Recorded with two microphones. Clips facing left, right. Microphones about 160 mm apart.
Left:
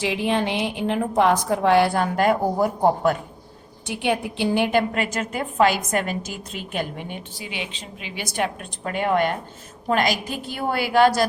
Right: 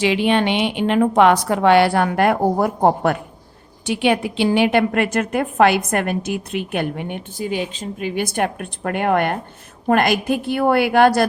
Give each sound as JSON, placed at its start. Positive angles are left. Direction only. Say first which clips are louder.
{"t": 0.0, "sound": "a woman's voice", "louder": "right 5 dB", "side_deg": -75}
{"t": 3.8, "sound": "a woman's voice", "louder": "right 6 dB", "side_deg": -90}